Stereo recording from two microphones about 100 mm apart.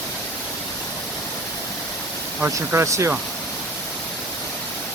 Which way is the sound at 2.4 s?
30° right (ahead or behind).